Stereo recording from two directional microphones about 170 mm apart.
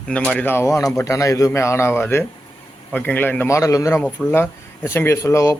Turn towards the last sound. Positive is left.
turn(degrees=15)  # may be behind; listen again after turning